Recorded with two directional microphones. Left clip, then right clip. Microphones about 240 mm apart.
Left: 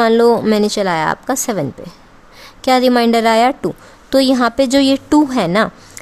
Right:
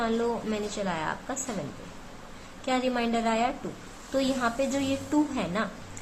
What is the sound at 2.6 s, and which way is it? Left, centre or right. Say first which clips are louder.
A woman's voice: left 16 dB; left.